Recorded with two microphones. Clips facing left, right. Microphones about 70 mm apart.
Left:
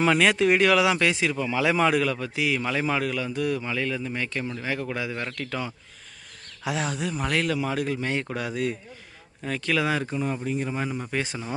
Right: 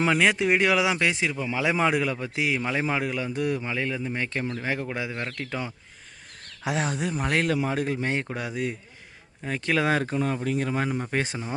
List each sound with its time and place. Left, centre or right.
0.0 s speech: centre; by 4.9 s right
4.9 s speech: centre
6.7 s a man's voice: right
8.4 s a man's voice: centre; by 10.9 s right
11.1 s a man's voice: right